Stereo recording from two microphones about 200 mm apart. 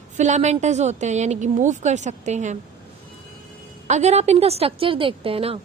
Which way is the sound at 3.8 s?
35° right (ahead or behind).